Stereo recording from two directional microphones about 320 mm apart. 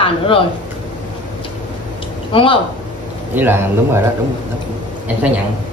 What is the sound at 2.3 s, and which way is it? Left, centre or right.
Speech, centre.